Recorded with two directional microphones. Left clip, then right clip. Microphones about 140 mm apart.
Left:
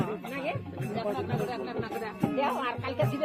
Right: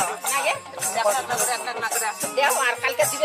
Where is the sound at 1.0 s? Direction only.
50° right (ahead or behind).